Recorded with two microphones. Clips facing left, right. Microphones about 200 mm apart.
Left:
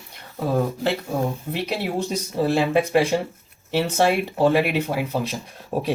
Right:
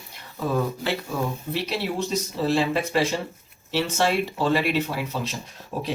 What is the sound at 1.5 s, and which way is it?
Speech, 50° left (ahead or behind).